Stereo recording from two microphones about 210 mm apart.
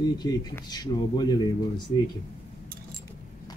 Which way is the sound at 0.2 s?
20° left (ahead or behind).